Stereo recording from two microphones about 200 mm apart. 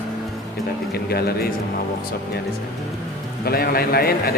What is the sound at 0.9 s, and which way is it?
Speech, 50° left (ahead or behind).